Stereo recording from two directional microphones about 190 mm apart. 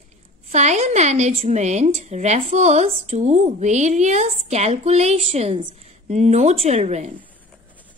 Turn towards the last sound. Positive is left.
turn(degrees=-40)  # may be behind; listen again after turning